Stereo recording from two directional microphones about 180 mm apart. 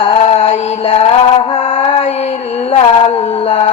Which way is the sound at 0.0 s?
30° left (ahead or behind).